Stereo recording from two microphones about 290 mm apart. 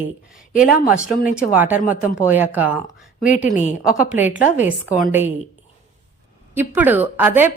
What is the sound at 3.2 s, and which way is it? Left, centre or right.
Speech, left.